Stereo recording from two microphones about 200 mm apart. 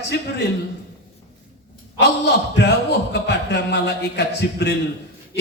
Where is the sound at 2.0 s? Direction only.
60° left (ahead or behind).